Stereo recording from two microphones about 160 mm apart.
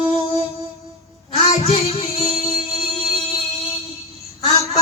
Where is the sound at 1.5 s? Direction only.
40° left (ahead or behind).